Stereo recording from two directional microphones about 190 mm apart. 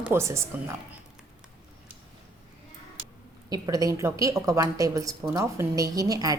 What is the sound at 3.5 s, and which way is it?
Speech, 20° right (ahead or behind).